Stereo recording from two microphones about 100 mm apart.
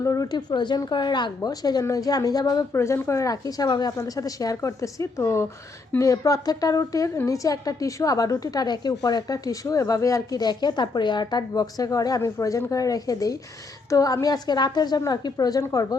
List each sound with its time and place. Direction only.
0.0 s a woman's voice: 35° left (ahead or behind)
2.7 s a woman's voice: 30° left (ahead or behind)